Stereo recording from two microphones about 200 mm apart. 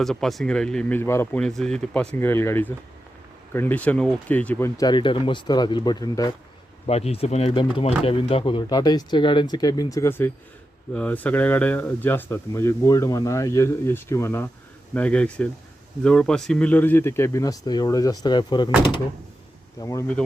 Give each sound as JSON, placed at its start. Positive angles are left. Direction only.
{"t": 0.0, "sound": "speech", "side_deg": 0}
{"t": 6.8, "sound": "speech", "side_deg": 30}
{"t": 19.8, "sound": "speech", "side_deg": 15}